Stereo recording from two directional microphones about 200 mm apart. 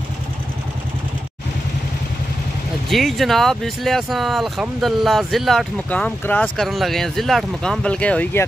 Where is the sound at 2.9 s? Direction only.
Centre (ahead or behind).